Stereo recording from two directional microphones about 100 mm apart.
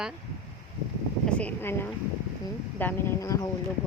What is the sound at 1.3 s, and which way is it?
A woman's voice, 20° left (ahead or behind).